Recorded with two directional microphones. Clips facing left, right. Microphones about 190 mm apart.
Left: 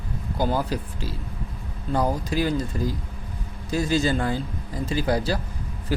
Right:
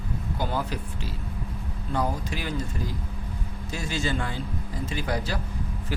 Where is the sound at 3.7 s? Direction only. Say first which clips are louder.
Left 8 dB; 40° left (ahead or behind).